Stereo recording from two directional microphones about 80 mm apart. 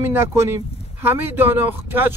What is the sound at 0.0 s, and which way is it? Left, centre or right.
Speech, right.